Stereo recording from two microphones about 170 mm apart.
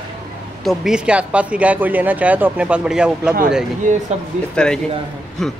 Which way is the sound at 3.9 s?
45° right (ahead or behind).